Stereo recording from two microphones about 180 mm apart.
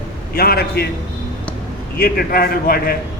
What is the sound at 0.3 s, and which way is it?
Speech, 60° left (ahead or behind).